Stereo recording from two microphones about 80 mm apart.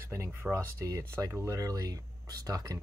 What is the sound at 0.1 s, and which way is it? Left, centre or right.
Speech, right.